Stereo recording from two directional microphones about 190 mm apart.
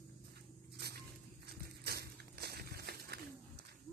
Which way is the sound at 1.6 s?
55° right (ahead or behind).